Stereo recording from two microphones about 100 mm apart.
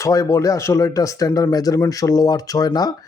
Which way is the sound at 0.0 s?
35° left (ahead or behind).